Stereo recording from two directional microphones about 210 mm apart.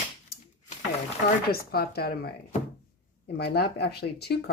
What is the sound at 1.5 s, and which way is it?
Speech, 45° left (ahead or behind).